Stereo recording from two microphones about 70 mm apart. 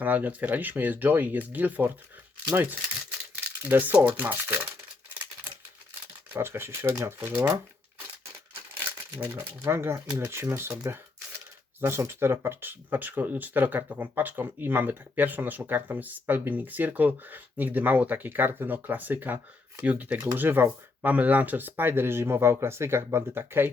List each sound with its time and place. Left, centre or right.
0.0 s speech: right
6.3 s speech: right
8.8 s speech: right